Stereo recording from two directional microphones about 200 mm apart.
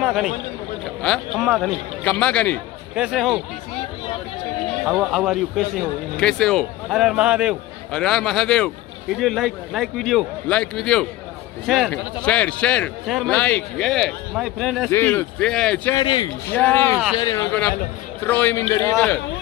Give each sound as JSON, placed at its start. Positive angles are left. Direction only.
{"t": 0.0, "sound": "a man's voice", "side_deg": 0}
{"t": 4.8, "sound": "a man's voice", "side_deg": -5}
{"t": 14.9, "sound": "speech", "side_deg": 10}
{"t": 16.0, "sound": "speech", "side_deg": 20}
{"t": 16.5, "sound": "speech", "side_deg": 10}